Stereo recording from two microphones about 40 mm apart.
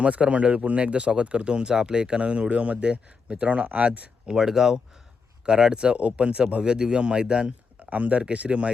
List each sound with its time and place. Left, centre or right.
0.0 s speech: right
4.3 s speech: centre
7.8 s speech: right